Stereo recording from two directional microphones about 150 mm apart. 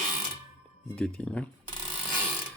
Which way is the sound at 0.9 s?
5° left (ahead or behind).